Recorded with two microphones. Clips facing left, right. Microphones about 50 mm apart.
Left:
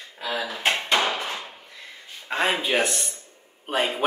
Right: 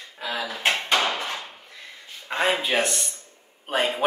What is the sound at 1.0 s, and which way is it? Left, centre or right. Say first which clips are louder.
Hammer: even; centre.